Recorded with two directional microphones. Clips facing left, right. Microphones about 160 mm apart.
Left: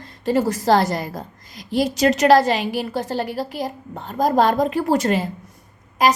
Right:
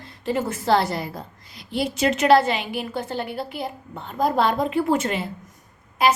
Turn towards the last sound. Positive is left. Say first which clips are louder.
# left 2 dB
turn(degrees=40)  # may be behind; listen again after turning